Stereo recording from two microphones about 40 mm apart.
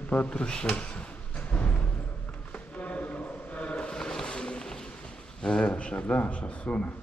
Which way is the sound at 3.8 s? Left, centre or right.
Centre.